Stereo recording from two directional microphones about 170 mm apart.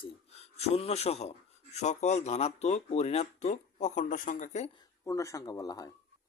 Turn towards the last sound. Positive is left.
turn(degrees=20)  # may be behind; listen again after turning